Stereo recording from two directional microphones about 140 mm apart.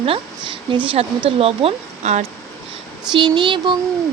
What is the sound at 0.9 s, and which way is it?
Speech, 45° right (ahead or behind).